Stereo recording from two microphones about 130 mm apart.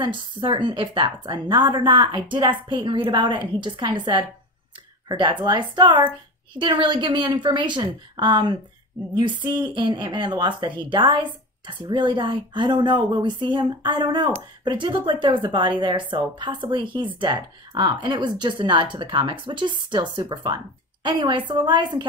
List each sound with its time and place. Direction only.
0.0 s a woman's voice: 40° right (ahead or behind)